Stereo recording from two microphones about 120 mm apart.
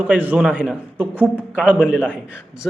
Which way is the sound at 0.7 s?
15° right (ahead or behind).